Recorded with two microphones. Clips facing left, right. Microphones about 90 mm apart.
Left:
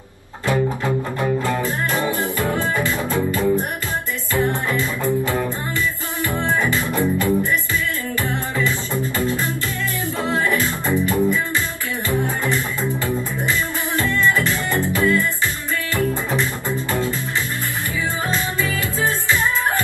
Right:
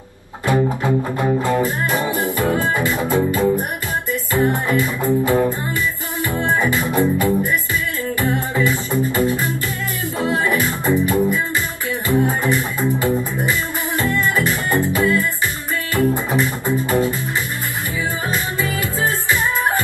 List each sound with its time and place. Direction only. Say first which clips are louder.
1.4 s music: right 3 dB; 20° right (ahead or behind)
18.3 s music: right 1 dB; 20° right (ahead or behind)